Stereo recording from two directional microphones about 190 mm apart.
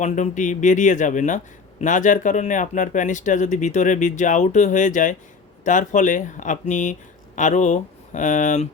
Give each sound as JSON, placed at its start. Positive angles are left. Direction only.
{"t": 0.0, "sound": "speech", "side_deg": 40}